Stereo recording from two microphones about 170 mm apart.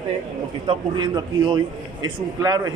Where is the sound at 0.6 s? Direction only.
25° right (ahead or behind).